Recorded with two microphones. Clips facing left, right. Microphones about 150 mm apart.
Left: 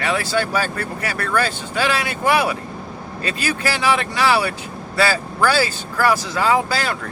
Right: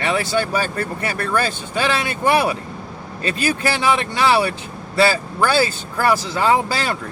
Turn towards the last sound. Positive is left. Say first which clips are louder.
# right 1 dB
turn(degrees=-25)  # may be behind; listen again after turning